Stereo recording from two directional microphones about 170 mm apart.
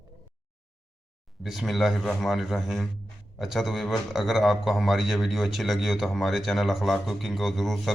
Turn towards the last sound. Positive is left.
turn(degrees=0)  # may be behind; listen again after turning